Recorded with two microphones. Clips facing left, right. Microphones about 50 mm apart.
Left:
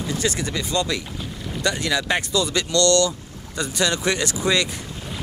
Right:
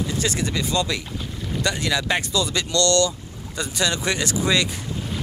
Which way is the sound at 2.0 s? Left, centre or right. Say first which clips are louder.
Left 1 dB; left.